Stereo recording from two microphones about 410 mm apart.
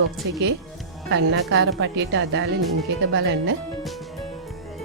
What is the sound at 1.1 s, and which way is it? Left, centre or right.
A woman's voice, right.